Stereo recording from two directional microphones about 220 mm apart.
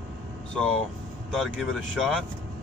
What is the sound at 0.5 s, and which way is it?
Speech, 5° left (ahead or behind).